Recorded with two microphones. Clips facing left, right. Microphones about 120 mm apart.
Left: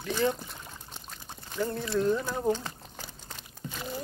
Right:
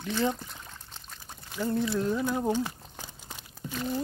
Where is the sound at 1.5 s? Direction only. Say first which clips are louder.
Right 2 dB; 5° right (ahead or behind).